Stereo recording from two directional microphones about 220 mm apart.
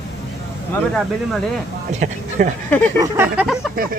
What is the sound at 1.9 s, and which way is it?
Speech, 35° right (ahead or behind).